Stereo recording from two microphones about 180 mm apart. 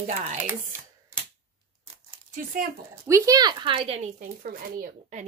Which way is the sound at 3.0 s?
15° right (ahead or behind).